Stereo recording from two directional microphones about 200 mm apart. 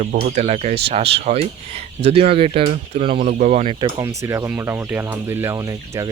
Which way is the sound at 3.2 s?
40° right (ahead or behind).